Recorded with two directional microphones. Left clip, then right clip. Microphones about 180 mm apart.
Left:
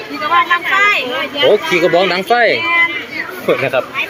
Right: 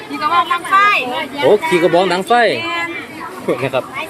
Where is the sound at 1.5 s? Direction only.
15° right (ahead or behind).